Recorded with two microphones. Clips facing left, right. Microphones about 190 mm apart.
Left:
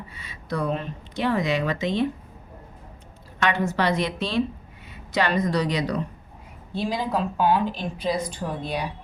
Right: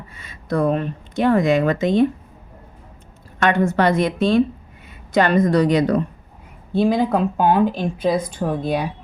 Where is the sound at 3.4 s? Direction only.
50° right (ahead or behind).